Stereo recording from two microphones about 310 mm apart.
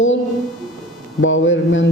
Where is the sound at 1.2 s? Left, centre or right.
Left.